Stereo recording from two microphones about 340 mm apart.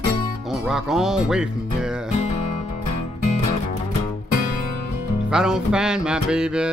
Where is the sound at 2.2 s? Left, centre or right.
Centre.